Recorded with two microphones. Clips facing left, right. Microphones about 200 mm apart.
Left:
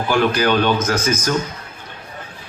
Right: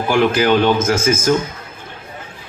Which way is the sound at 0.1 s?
25° right (ahead or behind).